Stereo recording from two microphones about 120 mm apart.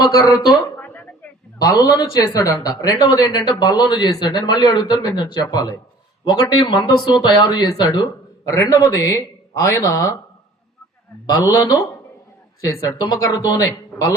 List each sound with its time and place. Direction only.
0.0 s speech: 30° left (ahead or behind)
0.8 s a sound: 15° left (ahead or behind)
1.6 s speech: 30° left (ahead or behind)
11.5 s speech: 30° left (ahead or behind)